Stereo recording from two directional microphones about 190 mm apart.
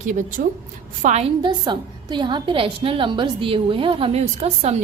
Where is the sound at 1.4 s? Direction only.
20° right (ahead or behind).